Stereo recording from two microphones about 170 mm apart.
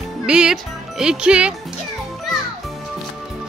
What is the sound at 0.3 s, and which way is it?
Music, 5° right (ahead or behind).